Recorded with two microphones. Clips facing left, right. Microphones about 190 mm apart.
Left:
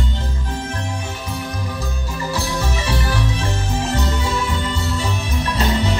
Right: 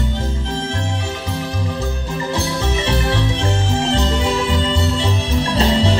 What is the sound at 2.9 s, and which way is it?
Music, 25° right (ahead or behind).